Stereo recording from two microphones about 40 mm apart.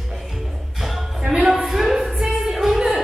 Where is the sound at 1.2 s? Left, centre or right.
Centre.